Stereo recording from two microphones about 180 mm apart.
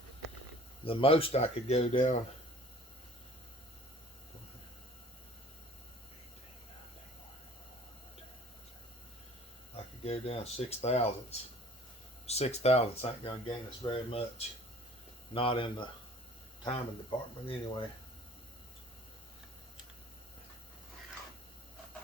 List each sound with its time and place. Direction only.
0.9 s speech: 30° left (ahead or behind)
9.7 s speech: 35° left (ahead or behind)